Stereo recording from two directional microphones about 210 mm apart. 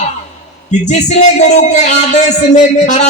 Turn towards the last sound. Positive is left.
turn(degrees=35)  # may be behind; listen again after turning